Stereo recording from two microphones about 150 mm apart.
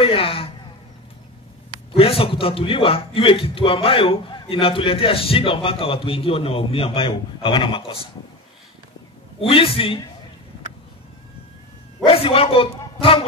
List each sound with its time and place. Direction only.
0.0 s speech: 40° left (ahead or behind)
2.0 s a man's voice: 40° left (ahead or behind)
9.4 s a man's voice: 40° left (ahead or behind)
12.1 s a man's voice: 40° left (ahead or behind)